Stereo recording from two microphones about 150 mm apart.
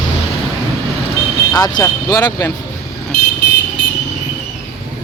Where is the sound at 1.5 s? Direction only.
25° left (ahead or behind).